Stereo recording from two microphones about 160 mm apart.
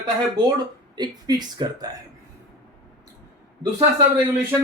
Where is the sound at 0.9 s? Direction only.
25° right (ahead or behind).